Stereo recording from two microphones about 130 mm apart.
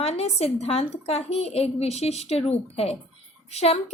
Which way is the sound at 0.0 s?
55° left (ahead or behind).